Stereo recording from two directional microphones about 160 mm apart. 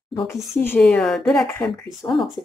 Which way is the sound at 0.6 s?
10° left (ahead or behind).